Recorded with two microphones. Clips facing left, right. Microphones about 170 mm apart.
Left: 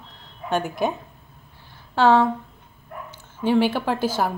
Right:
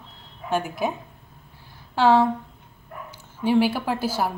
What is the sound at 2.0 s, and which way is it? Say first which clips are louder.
A woman's voice: left 1 dB; 10° right (ahead or behind).